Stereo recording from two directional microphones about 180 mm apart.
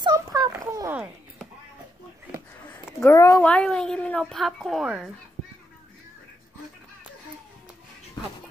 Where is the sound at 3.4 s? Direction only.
5° left (ahead or behind).